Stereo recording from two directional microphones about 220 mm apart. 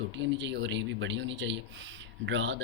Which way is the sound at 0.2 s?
55° right (ahead or behind).